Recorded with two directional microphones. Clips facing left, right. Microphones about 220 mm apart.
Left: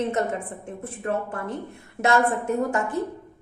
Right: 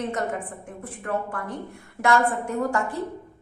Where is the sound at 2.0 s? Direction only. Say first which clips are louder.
Left 1 dB; 20° left (ahead or behind).